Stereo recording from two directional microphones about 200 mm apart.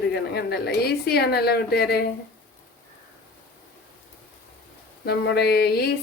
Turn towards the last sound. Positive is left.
turn(degrees=55)  # may be behind; listen again after turning